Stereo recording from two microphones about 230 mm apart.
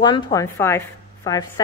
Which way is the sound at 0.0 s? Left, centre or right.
Centre.